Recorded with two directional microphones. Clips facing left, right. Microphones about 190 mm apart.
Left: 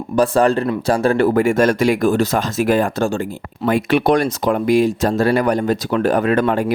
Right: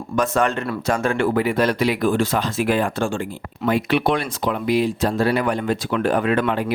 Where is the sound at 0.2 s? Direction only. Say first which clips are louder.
Left 6 dB; 35° left (ahead or behind).